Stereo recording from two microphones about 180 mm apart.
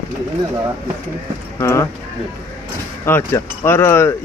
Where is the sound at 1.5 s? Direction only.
15° left (ahead or behind).